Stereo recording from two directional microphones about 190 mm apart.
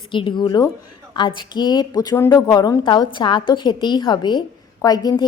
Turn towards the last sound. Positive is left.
turn(degrees=20)  # may be behind; listen again after turning